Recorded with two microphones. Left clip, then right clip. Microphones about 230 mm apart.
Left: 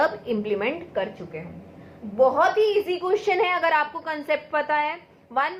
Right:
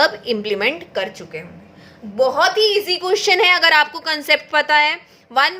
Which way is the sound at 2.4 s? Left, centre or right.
Right.